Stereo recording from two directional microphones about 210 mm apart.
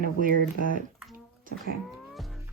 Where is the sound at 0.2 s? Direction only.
40° right (ahead or behind).